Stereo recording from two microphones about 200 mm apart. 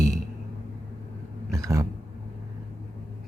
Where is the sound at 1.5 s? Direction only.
15° right (ahead or behind).